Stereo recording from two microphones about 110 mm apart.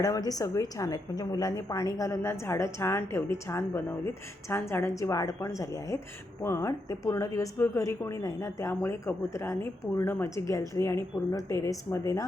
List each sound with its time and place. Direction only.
0.0 s a woman's voice: 35° left (ahead or behind)